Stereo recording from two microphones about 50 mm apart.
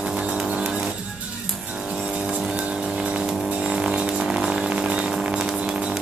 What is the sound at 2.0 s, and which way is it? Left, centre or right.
Vehicle, centre.